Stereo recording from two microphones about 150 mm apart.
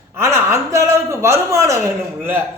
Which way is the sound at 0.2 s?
15° right (ahead or behind).